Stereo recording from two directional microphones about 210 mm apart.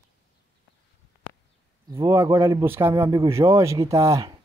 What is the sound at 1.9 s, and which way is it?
Speech, 15° right (ahead or behind).